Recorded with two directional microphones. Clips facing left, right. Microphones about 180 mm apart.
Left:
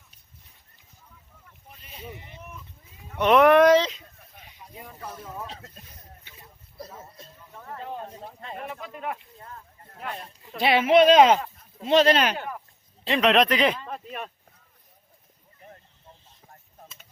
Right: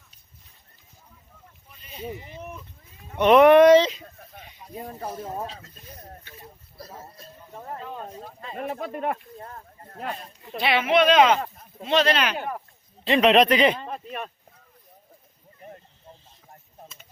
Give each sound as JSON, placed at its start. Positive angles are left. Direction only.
{"t": 3.2, "sound": "speech", "side_deg": 0}
{"t": 4.7, "sound": "speech", "side_deg": -40}
{"t": 7.5, "sound": "speech", "side_deg": -25}
{"t": 8.6, "sound": "speech", "side_deg": -45}
{"t": 10.6, "sound": "speech", "side_deg": 40}
{"t": 13.1, "sound": "speech", "side_deg": 0}